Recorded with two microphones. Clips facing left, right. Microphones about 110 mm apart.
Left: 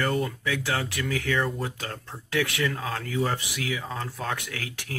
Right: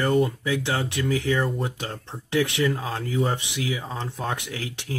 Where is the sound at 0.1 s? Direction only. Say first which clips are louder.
Right 6 dB; 30° right (ahead or behind).